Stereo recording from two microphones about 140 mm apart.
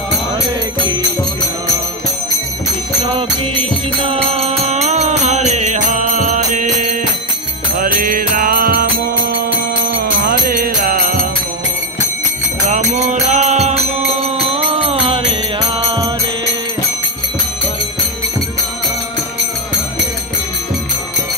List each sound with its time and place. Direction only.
4.1 s music: 45° right (ahead or behind); by 7.0 s 65° right (ahead or behind)
7.8 s music: 85° right
10.2 s music: 80° right
12.6 s music: 60° right (ahead or behind)
14.4 s music: 45° right (ahead or behind)